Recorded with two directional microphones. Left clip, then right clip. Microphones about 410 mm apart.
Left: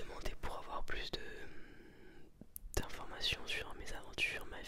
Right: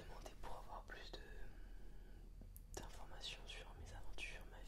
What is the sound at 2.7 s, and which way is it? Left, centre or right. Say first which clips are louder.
Whispering: left 12 dB; left.